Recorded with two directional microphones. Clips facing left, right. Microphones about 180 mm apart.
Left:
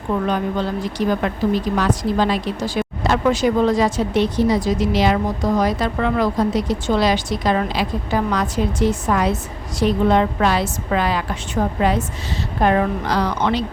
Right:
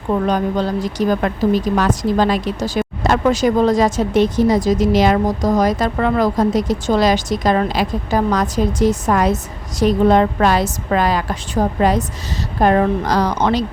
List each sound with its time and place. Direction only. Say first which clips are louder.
0.1 s a woman's voice: right 3 dB; 40° right (ahead or behind)